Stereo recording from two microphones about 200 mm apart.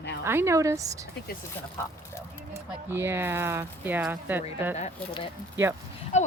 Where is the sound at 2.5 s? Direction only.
10° right (ahead or behind).